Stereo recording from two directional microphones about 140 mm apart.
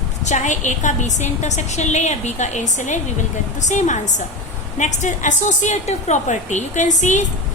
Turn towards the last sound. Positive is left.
turn(degrees=60)  # may be behind; listen again after turning